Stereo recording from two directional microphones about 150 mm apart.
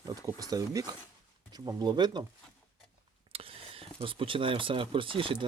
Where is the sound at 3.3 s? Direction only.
40° right (ahead or behind).